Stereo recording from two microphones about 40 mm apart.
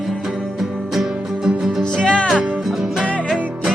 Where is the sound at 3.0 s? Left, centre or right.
Left.